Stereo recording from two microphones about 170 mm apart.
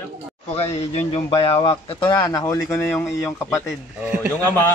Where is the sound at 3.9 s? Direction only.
5° right (ahead or behind).